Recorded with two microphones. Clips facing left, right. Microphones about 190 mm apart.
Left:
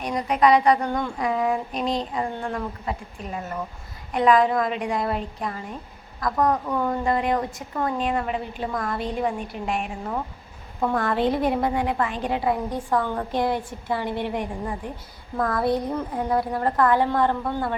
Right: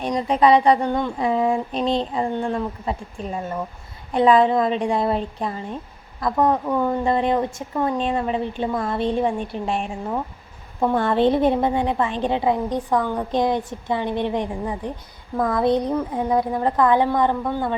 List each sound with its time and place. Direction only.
0.0 s a woman's voice: 25° right (ahead or behind)
7.0 s a woman's voice: 25° right (ahead or behind)